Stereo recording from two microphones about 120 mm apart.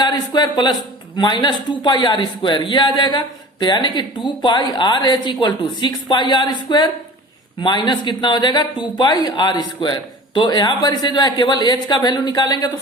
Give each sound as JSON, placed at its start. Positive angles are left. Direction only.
{"t": 0.0, "sound": "speech", "side_deg": 40}